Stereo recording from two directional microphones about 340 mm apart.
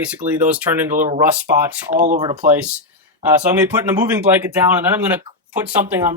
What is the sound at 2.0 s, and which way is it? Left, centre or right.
Speech, centre.